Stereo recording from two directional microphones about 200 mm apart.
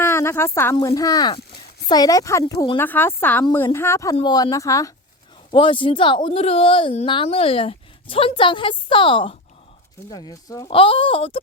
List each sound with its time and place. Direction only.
0.0 s a woman's voice: 10° left (ahead or behind)